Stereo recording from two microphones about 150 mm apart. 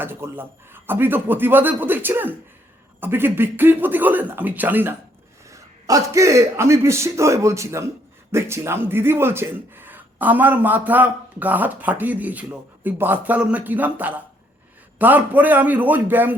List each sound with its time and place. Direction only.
0.0 s a man's voice: 15° right (ahead or behind)